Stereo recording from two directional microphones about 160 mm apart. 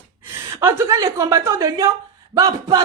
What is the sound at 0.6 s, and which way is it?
A woman's voice, 20° right (ahead or behind).